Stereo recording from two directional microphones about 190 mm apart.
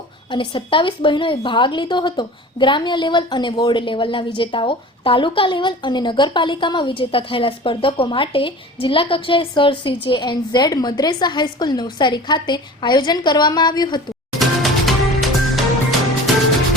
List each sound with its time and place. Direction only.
0.3 s a woman's voice: 25° left (ahead or behind)
14.3 s music: centre (ahead or behind)